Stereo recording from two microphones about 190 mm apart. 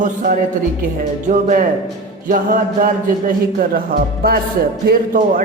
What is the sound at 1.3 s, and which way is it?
Speech, 45° right (ahead or behind).